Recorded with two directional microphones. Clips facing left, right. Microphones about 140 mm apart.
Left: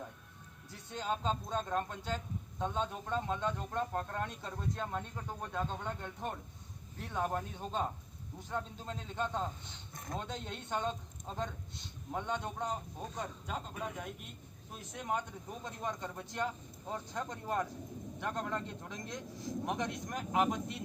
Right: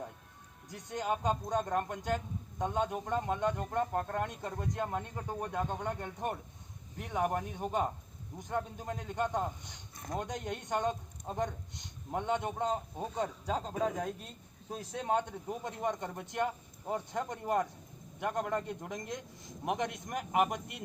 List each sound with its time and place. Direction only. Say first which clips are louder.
0.9 s a man's voice: right 3 dB; 15° right (ahead or behind)
13.2 s speech: right 6 dB; 80° right
13.8 s a man's voice: right 8 dB; 35° right (ahead or behind); by 20.8 s 15° right (ahead or behind)